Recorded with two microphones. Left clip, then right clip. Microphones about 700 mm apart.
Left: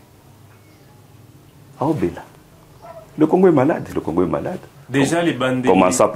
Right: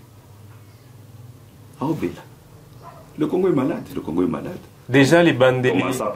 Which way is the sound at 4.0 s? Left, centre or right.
Left.